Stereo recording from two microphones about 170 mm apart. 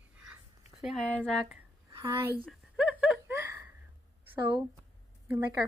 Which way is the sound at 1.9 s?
15° right (ahead or behind).